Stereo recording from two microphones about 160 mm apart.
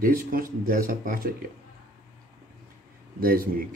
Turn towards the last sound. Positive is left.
turn(degrees=-65)  # may be behind; listen again after turning